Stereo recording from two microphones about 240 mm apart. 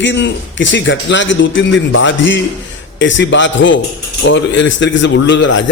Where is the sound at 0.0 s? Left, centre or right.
Left.